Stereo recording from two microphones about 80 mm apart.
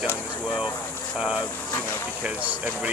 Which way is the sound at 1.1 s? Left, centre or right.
Centre.